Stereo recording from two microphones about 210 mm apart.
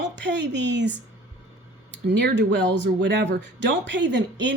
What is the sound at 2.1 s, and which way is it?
Speech, 55° right (ahead or behind).